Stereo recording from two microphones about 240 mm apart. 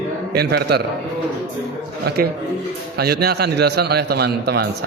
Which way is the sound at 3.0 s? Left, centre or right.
Right.